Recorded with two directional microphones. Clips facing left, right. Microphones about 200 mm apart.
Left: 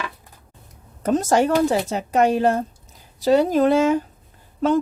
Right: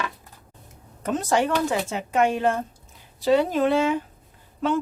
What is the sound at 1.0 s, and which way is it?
Speech, 40° left (ahead or behind).